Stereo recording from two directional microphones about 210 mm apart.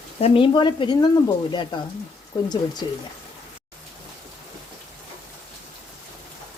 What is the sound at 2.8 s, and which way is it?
Speech, 20° left (ahead or behind).